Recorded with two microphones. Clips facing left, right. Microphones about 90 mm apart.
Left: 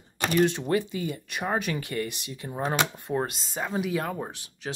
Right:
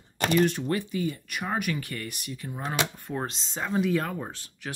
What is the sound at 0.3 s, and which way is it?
Speech, 20° left (ahead or behind).